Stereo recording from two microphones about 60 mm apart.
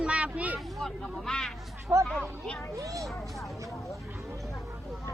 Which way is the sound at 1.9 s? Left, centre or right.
Right.